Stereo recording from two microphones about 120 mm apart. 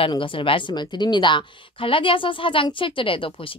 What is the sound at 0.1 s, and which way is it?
A woman's voice, 45° left (ahead or behind).